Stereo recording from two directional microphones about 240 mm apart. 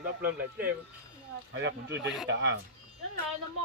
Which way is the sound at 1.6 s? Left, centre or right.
Right.